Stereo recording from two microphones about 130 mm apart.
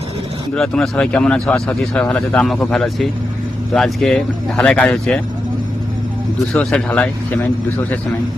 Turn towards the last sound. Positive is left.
turn(degrees=10)  # may be behind; listen again after turning